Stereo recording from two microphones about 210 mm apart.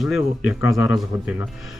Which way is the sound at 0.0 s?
Centre (ahead or behind).